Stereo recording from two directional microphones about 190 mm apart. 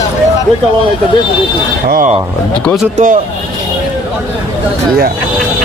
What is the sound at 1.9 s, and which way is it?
Speech, 45° right (ahead or behind).